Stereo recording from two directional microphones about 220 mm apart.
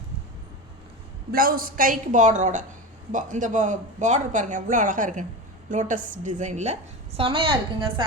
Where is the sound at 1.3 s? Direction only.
40° right (ahead or behind); by 7.5 s 25° right (ahead or behind).